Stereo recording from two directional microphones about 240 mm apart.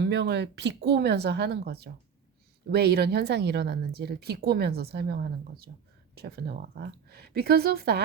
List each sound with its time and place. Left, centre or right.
0.0 s speech: right